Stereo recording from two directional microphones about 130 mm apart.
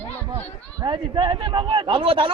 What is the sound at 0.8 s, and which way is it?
A man's voice, 40° right (ahead or behind).